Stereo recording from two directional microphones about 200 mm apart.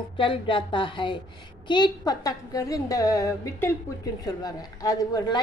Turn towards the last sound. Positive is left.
turn(degrees=20)  # may be behind; listen again after turning